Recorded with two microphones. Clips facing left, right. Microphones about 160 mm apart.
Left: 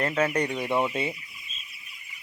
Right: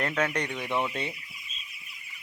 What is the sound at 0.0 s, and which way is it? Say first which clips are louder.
Chicken: left 4 dB; 5° left (ahead or behind).